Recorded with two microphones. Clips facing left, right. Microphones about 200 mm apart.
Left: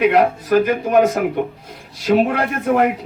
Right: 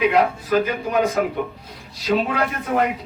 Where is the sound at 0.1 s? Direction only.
70° left (ahead or behind).